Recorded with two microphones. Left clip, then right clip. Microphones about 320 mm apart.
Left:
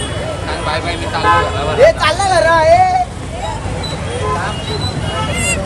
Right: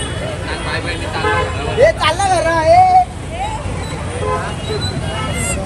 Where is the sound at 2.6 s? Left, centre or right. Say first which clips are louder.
Even; right.